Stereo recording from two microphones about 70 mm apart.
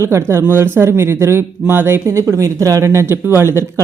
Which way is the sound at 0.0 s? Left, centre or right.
Right.